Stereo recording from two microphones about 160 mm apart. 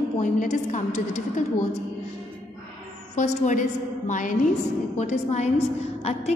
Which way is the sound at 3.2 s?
50° left (ahead or behind).